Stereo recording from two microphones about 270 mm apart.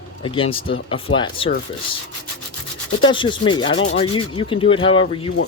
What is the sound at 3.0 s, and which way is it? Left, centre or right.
Sanding, centre.